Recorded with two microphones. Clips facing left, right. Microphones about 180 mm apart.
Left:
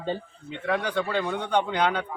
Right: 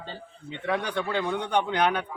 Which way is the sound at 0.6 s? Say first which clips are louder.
Left 2 dB; 15° right (ahead or behind).